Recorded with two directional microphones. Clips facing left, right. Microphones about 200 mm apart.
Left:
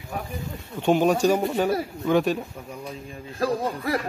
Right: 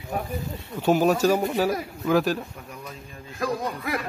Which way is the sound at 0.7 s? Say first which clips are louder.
Even; 5° right (ahead or behind).